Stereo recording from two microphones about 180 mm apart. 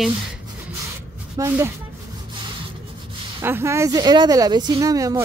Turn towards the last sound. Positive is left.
turn(degrees=-20)  # may be behind; listen again after turning